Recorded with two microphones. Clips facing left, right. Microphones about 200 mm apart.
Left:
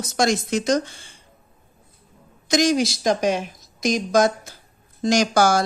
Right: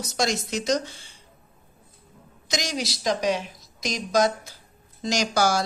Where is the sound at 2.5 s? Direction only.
55° left (ahead or behind).